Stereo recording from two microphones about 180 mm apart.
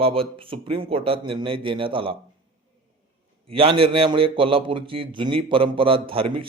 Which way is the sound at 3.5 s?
30° right (ahead or behind).